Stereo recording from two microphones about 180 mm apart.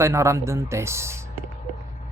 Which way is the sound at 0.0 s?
15° right (ahead or behind).